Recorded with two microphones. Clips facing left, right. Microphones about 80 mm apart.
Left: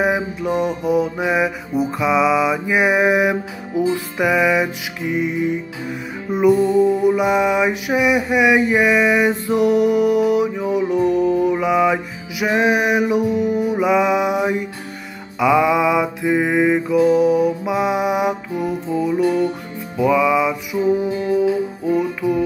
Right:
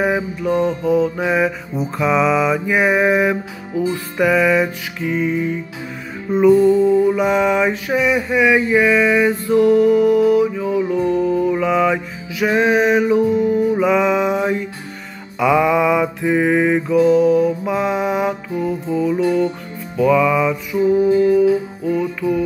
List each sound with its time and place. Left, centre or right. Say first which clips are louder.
0.0 s mantra: even; centre
16.9 s mantra: right 3 dB; centre
18.9 s music: right 1 dB; centre
20.0 s mantra: right 1 dB; centre
20.8 s music: right 6 dB; left